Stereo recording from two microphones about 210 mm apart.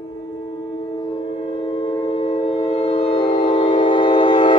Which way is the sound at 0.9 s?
25° left (ahead or behind).